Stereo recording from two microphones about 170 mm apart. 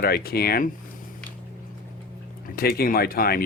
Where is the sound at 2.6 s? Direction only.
65° left (ahead or behind).